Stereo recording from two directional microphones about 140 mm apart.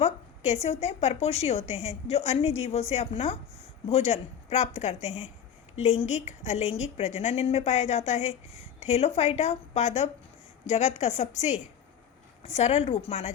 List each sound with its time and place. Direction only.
0.0 s a woman's voice: 50° left (ahead or behind)